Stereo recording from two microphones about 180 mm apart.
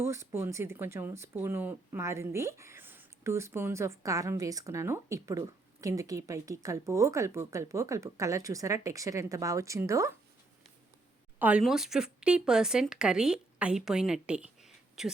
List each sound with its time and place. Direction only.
0.0 s speech: 15° right (ahead or behind)
11.3 s speech: 5° right (ahead or behind)